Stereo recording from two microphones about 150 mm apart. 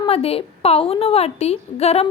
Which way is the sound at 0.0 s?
40° left (ahead or behind).